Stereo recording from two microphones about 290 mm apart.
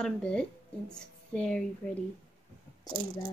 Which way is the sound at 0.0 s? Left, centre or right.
Centre.